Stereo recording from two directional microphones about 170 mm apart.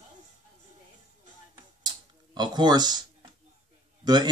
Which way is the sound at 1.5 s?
25° right (ahead or behind).